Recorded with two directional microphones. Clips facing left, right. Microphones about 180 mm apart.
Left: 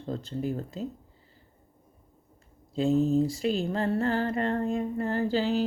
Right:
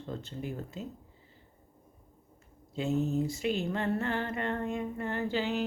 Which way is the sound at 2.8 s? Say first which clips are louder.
Left 6 dB; 35° left (ahead or behind).